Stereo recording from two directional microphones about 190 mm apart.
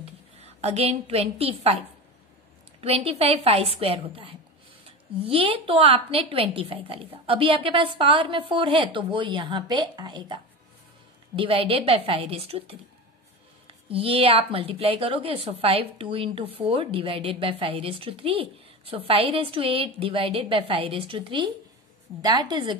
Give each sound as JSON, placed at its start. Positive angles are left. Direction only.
{"t": 0.0, "sound": "a woman's voice", "side_deg": -35}